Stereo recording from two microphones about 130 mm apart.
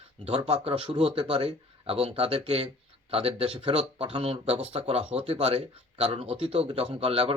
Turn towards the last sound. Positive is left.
turn(degrees=-45)  # may be behind; listen again after turning